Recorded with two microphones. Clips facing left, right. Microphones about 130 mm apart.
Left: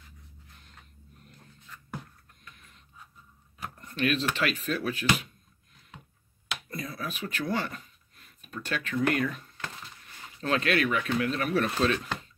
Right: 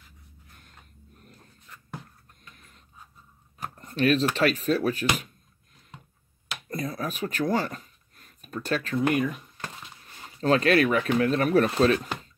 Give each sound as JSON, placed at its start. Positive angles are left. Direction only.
{"t": 2.5, "sound": "a sound", "side_deg": -40}
{"t": 3.6, "sound": "speech", "side_deg": -35}
{"t": 6.7, "sound": "a sound", "side_deg": -40}
{"t": 9.0, "sound": "speech", "side_deg": -15}
{"t": 10.4, "sound": "speech", "side_deg": -35}
{"t": 11.6, "sound": "speech", "side_deg": -30}